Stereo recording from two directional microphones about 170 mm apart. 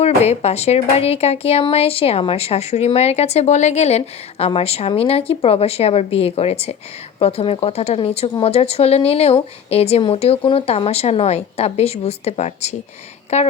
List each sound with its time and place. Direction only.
0.0 s speech: 40° left (ahead or behind)